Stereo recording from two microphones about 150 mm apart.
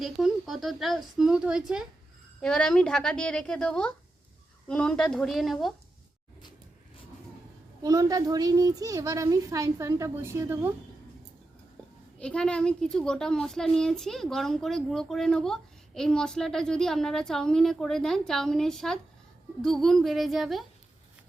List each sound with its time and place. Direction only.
0.0 s a woman's voice: centre (ahead or behind)
7.8 s a woman's voice: 25° right (ahead or behind)
12.2 s a woman's voice: 5° left (ahead or behind)